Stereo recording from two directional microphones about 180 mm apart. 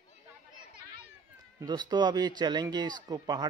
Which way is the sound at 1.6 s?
25° right (ahead or behind).